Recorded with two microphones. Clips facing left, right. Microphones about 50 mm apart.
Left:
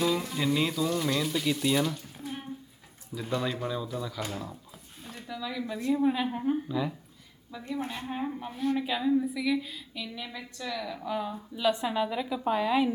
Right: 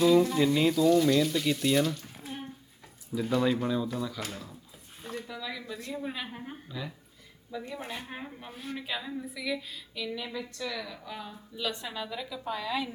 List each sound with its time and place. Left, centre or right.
0.0 s speech: centre
3.1 s speech: centre
4.2 s a woman's voice: centre
5.4 s speech: centre
5.6 s a woman's voice: centre
7.9 s a woman's voice: centre; by 12.9 s left